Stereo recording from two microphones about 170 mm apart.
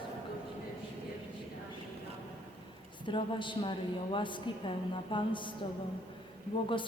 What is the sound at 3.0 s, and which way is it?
A woman's voice, 30° left (ahead or behind).